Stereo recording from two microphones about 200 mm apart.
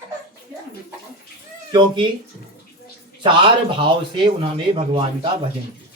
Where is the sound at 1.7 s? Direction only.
25° right (ahead or behind).